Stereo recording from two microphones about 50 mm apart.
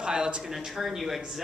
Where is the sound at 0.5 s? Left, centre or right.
Centre.